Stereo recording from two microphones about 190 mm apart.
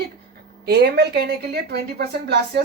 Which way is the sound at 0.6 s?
60° right (ahead or behind).